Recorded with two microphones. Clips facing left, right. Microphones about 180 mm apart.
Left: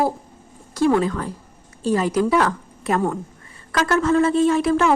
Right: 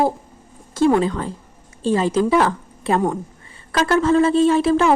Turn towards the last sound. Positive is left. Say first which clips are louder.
# right 2 dB
turn(degrees=-30)  # may be behind; listen again after turning